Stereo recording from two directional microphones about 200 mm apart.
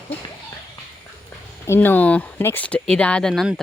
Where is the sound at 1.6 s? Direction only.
10° left (ahead or behind).